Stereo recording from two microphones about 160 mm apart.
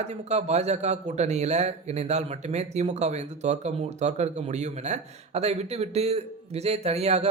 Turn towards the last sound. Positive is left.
turn(degrees=-40)  # may be behind; listen again after turning